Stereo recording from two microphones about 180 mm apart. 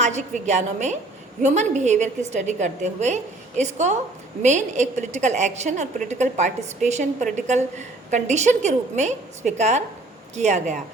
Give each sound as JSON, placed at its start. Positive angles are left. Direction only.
{"t": 0.0, "sound": "a woman's voice", "side_deg": -40}